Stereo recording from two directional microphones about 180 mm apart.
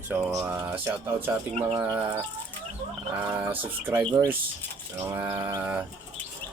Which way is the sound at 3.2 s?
10° right (ahead or behind).